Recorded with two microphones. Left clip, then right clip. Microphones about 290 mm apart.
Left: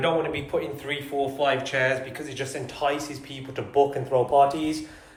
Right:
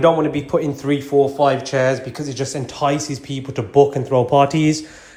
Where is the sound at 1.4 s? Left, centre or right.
Centre.